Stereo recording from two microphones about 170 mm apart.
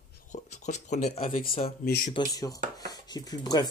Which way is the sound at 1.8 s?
65° left (ahead or behind).